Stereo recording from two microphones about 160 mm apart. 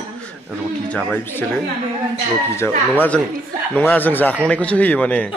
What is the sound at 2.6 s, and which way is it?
Speech, 10° left (ahead or behind).